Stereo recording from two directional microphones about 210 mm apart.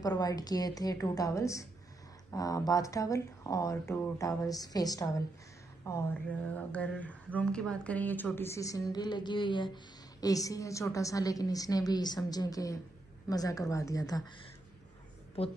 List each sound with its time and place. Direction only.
0.0 s speech: 15° left (ahead or behind)
5.9 s speech: 5° left (ahead or behind)